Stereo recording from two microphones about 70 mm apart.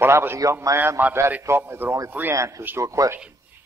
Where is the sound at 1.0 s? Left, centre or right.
Right.